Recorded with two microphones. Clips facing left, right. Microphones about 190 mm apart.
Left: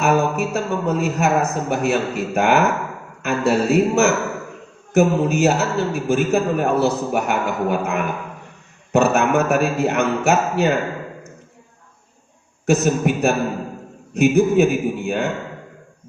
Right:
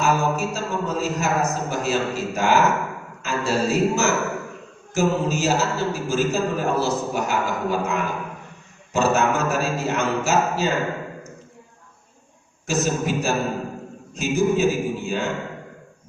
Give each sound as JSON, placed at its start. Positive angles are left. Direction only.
{"t": 0.0, "sound": "a man's voice", "side_deg": 60}
{"t": 12.6, "sound": "a man's voice", "side_deg": 60}